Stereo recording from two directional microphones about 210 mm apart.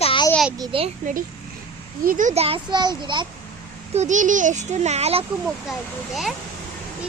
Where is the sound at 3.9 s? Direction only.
35° right (ahead or behind).